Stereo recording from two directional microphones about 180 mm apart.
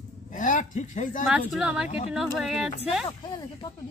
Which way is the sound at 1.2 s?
5° right (ahead or behind).